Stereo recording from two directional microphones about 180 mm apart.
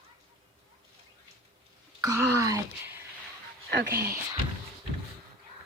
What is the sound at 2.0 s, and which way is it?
Speech, 20° right (ahead or behind).